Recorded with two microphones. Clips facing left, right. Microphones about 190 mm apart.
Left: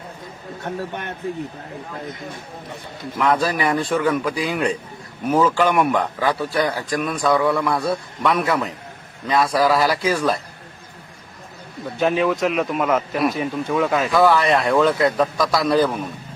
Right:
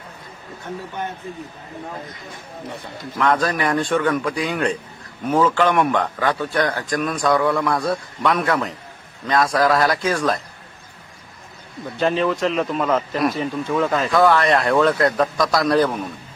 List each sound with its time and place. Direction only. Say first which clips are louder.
0.7 s speech: left 3 dB; 65° left (ahead or behind)
3.2 s speech: even; 10° left (ahead or behind)
11.9 s a man's voice: left 1 dB; 5° left (ahead or behind)